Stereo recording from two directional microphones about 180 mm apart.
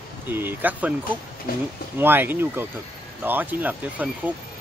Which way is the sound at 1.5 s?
55° left (ahead or behind).